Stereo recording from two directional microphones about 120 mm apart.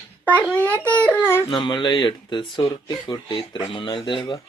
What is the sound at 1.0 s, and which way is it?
Speech, 15° left (ahead or behind).